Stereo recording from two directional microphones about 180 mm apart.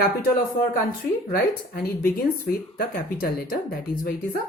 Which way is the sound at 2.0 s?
55° left (ahead or behind).